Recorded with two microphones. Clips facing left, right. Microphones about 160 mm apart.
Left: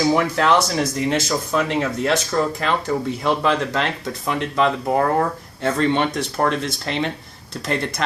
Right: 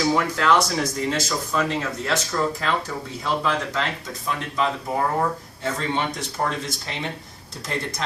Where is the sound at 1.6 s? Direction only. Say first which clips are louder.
Left 5 dB; 70° left (ahead or behind).